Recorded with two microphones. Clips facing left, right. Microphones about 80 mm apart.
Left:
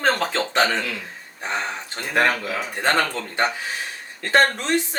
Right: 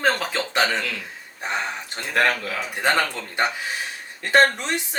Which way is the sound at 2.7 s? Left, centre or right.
Centre.